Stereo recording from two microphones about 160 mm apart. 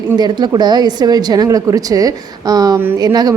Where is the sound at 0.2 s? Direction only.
25° right (ahead or behind).